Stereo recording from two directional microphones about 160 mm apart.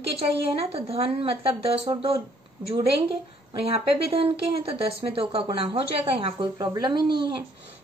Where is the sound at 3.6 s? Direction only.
35° right (ahead or behind).